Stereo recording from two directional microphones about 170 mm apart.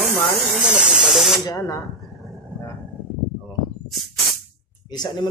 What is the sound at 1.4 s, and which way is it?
Speech, 20° left (ahead or behind).